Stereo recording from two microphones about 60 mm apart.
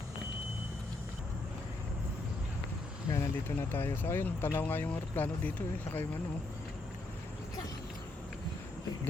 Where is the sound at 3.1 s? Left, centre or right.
Left.